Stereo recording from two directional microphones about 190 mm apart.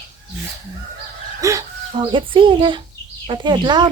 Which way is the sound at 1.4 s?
15° right (ahead or behind).